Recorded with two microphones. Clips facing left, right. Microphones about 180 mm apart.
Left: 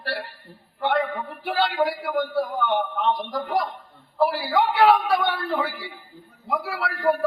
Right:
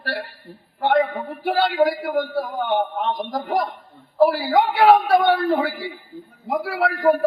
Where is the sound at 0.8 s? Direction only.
45° right (ahead or behind).